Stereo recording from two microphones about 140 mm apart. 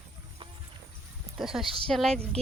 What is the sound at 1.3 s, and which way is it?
Speech, 5° right (ahead or behind).